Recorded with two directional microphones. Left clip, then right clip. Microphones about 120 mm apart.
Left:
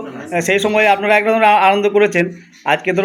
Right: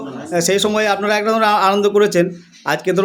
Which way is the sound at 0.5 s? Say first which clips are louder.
Left 5 dB; 35° right (ahead or behind).